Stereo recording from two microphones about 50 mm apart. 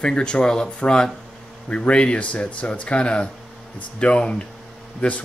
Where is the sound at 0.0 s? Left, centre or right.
Centre.